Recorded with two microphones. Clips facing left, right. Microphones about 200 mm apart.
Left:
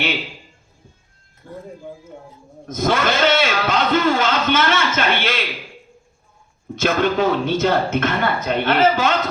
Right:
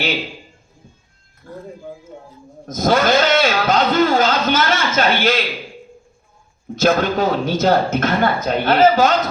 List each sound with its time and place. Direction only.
1.4 s speech: 20° left (ahead or behind)
2.6 s a man's voice: 40° right (ahead or behind)
6.7 s a man's voice: 40° right (ahead or behind)